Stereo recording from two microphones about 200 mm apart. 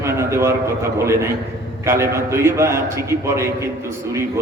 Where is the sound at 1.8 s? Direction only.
15° right (ahead or behind).